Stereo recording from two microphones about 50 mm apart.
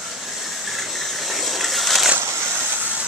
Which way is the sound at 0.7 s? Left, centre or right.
Centre.